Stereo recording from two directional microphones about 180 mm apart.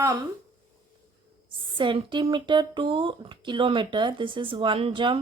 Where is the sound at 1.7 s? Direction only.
25° right (ahead or behind).